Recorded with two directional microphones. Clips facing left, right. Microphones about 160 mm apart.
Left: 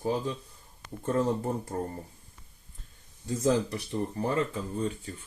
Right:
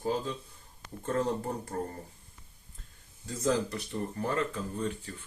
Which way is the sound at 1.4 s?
20° left (ahead or behind).